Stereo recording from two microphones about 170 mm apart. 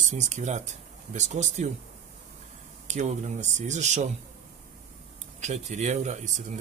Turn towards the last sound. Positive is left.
turn(degrees=-45)  # may be behind; listen again after turning